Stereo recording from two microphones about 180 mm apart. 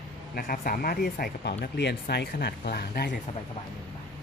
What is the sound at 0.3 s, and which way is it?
Speech, 55° left (ahead or behind).